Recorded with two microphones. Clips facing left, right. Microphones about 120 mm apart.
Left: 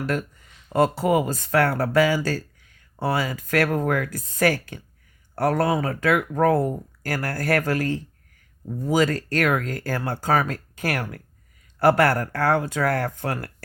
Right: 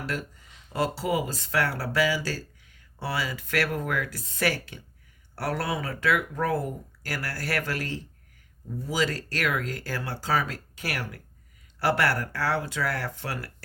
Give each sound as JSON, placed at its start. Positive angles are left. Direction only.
{"t": 0.0, "sound": "speech", "side_deg": 50}